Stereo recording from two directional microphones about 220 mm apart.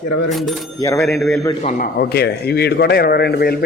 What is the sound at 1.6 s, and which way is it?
A man's voice, 40° left (ahead or behind).